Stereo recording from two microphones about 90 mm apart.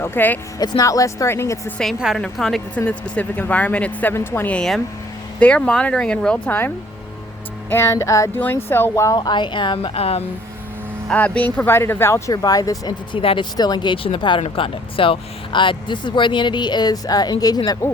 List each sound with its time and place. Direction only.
0.0 s speech: 25° left (ahead or behind)
0.6 s speech: 45° left (ahead or behind); by 1.7 s 30° left (ahead or behind)
2.0 s a woman's voice: 5° right (ahead or behind)
2.7 s speech: 15° left (ahead or behind)
4.1 s speech: 25° left (ahead or behind)
4.5 s a woman's voice: 5° left (ahead or behind); by 8.3 s 35° left (ahead or behind)
8.3 s speech: 20° left (ahead or behind)
9.1 s speech: 55° left (ahead or behind); by 10.2 s 90° left
11.1 s speech: 15° left (ahead or behind); by 12.9 s 40° left (ahead or behind)
12.9 s speech: 75° left (ahead or behind)
13.6 s speech: 50° left (ahead or behind)
17.8 s speech: 30° left (ahead or behind)